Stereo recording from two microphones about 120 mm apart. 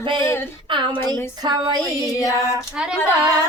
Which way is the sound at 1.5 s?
35° right (ahead or behind).